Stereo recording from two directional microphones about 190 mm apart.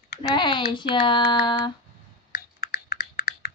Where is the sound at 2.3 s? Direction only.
50° left (ahead or behind).